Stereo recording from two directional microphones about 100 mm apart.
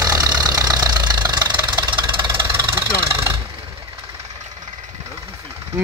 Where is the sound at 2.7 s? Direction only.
25° right (ahead or behind).